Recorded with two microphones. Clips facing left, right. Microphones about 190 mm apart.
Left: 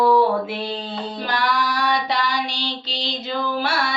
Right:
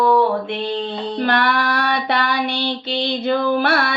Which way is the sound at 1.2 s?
60° right (ahead or behind).